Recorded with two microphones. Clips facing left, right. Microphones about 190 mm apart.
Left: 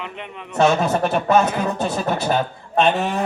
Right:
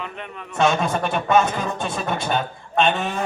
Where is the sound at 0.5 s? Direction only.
35° left (ahead or behind).